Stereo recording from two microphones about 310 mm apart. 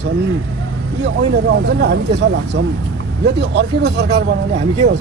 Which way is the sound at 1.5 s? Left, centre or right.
Right.